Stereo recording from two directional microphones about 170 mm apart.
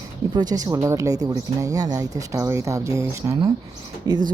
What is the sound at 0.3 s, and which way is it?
Speech, 25° right (ahead or behind).